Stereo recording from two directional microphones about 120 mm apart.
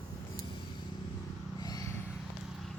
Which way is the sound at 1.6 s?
30° left (ahead or behind).